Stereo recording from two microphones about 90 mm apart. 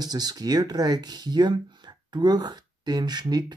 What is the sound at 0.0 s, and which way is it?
Speech, 50° right (ahead or behind).